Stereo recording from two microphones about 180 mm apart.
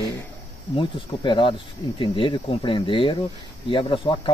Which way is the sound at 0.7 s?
25° left (ahead or behind).